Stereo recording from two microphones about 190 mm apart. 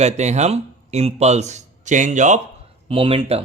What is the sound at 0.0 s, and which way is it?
A man's voice, 35° right (ahead or behind).